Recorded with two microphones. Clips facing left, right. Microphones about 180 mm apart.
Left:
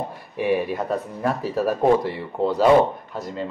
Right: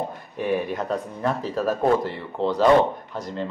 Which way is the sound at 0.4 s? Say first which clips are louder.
Left 2 dB; 5° left (ahead or behind).